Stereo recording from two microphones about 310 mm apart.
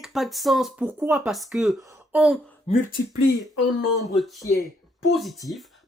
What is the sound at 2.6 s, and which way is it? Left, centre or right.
Speech, left.